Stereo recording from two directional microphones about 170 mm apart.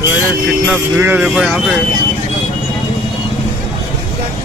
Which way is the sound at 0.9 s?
10° right (ahead or behind).